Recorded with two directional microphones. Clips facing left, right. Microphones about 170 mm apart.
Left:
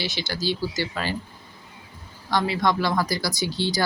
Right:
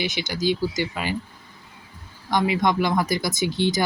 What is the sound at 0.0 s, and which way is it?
Speech, 15° right (ahead or behind).